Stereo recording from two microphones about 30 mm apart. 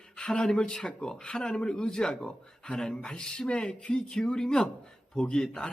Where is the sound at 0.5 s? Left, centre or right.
Left.